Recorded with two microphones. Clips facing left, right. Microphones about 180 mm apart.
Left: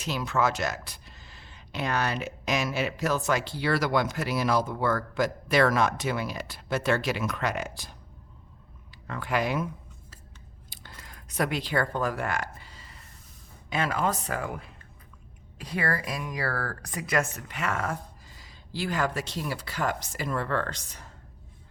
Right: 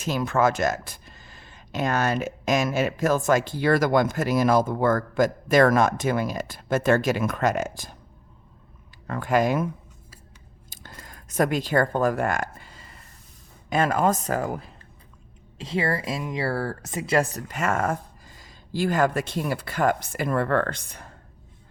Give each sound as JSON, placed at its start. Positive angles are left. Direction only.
{"t": 0.0, "sound": "speech", "side_deg": -50}
{"t": 9.0, "sound": "speech", "side_deg": -45}
{"t": 10.7, "sound": "a sound", "side_deg": -45}
{"t": 13.7, "sound": "speech", "side_deg": -45}
{"t": 15.5, "sound": "speech", "side_deg": -25}